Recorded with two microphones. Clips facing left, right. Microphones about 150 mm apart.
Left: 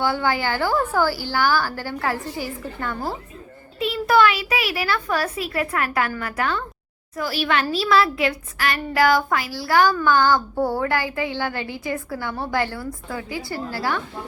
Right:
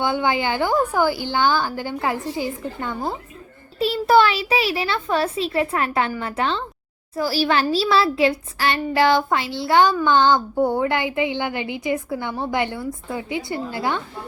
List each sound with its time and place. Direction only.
0.0 s a woman's voice: 20° right (ahead or behind)
3.8 s a woman's voice: 30° right (ahead or behind)